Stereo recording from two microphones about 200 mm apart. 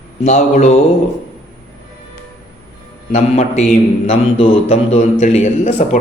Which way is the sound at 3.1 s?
35° left (ahead or behind).